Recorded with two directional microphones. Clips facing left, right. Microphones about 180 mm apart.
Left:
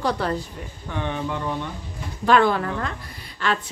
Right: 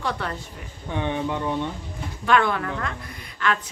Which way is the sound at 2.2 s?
35° left (ahead or behind).